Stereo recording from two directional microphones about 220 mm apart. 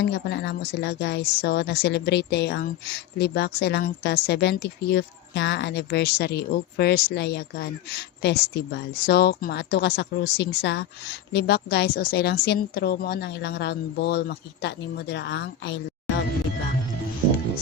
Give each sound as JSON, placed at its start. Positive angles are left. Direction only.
{"t": 0.0, "sound": "a woman's voice", "side_deg": 50}